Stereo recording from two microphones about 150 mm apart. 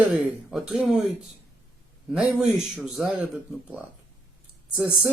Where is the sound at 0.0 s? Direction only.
10° right (ahead or behind).